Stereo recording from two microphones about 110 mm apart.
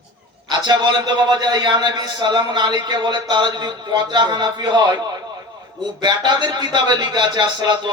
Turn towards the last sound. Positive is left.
turn(degrees=-45)  # may be behind; listen again after turning